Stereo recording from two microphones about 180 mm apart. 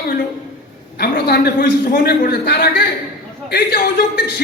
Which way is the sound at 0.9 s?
60° left (ahead or behind).